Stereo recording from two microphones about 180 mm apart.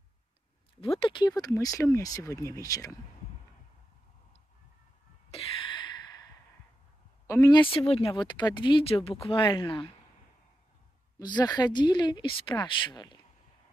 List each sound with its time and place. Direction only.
0.7 s speech: 30° left (ahead or behind)
5.3 s a sound: 30° left (ahead or behind)
7.2 s speech: 20° left (ahead or behind)
7.7 s speech: 30° left (ahead or behind)
11.1 s speech: 20° left (ahead or behind)